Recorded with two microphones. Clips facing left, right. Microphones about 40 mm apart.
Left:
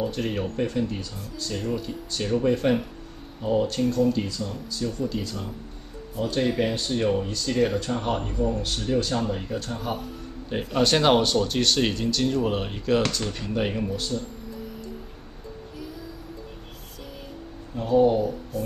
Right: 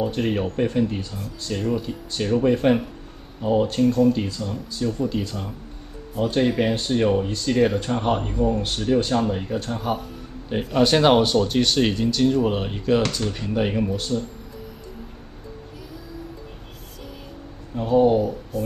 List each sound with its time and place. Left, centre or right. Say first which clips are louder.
0.1 s speech: right 4 dB; centre
6.7 s speech: right 4 dB; right
9.8 s speech: right 4 dB; centre
17.7 s speech: right 2 dB; centre